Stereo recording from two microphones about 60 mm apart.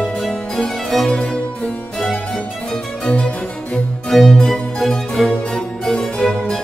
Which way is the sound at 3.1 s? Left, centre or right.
Left.